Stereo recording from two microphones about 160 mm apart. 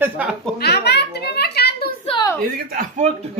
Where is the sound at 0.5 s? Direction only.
90° left.